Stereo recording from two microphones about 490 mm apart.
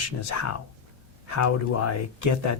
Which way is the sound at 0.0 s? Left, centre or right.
Left.